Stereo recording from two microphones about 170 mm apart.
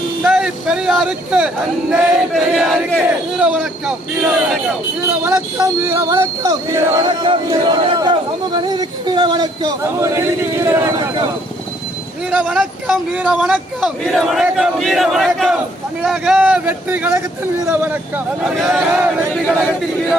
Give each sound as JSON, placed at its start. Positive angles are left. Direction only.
{"t": 0.2, "sound": "a man's voice", "side_deg": -5}
{"t": 5.2, "sound": "speech", "side_deg": -15}
{"t": 12.3, "sound": "a man's voice", "side_deg": -5}
{"t": 18.9, "sound": "speech", "side_deg": -15}